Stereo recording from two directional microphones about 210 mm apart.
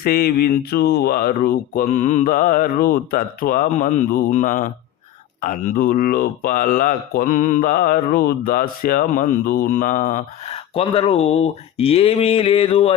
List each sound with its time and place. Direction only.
0.0 s speech: 45° left (ahead or behind); by 13.0 s 30° left (ahead or behind)